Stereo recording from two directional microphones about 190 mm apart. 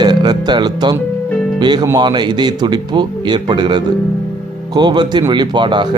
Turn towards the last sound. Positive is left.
turn(degrees=-25)  # may be behind; listen again after turning